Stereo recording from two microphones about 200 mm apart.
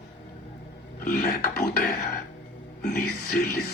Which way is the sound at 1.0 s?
45° left (ahead or behind).